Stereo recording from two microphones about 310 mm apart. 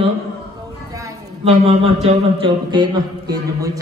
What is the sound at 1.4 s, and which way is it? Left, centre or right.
A man's voice, centre.